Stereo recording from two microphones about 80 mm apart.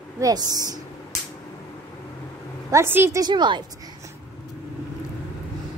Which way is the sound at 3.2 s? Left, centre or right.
Right.